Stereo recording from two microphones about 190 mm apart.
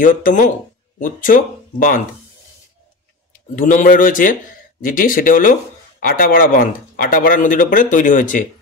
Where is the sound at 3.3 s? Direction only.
45° left (ahead or behind).